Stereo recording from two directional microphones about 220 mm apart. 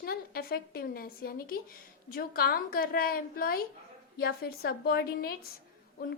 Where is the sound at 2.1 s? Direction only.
40° left (ahead or behind).